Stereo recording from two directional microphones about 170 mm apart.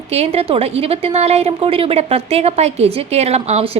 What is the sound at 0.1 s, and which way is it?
A woman's voice, 35° right (ahead or behind).